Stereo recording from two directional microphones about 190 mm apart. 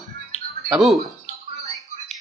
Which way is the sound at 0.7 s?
Centre (ahead or behind).